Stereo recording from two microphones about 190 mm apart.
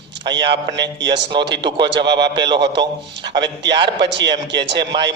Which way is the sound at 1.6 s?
25° right (ahead or behind).